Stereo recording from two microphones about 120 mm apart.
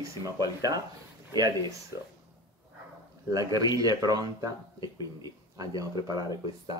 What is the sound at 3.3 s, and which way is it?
Speech, 30° right (ahead or behind).